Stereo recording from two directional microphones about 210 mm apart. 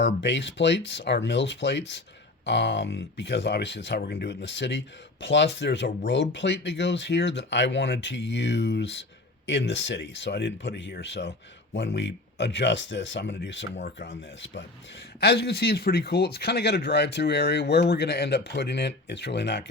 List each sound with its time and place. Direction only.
0.0 s speech: 55° left (ahead or behind)
15.2 s speech: 50° left (ahead or behind)